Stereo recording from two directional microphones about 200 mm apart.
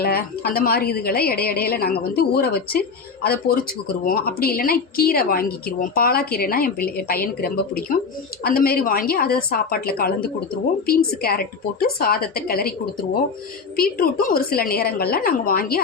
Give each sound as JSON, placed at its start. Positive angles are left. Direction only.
{"t": 0.0, "sound": "a woman's voice", "side_deg": 50}